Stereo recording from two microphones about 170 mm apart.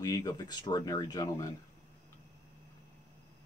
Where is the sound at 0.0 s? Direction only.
20° left (ahead or behind).